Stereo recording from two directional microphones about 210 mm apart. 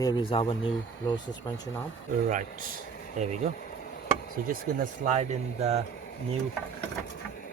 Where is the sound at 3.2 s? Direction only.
35° right (ahead or behind).